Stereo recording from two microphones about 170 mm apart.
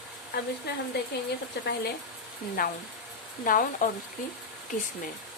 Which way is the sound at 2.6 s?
55° left (ahead or behind).